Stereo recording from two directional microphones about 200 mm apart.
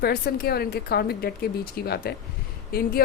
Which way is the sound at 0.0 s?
50° left (ahead or behind).